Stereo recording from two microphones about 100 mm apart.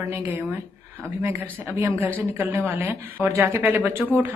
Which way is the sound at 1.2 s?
25° right (ahead or behind).